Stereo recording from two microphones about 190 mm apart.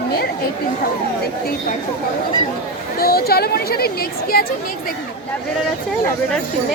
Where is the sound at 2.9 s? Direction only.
55° left (ahead or behind).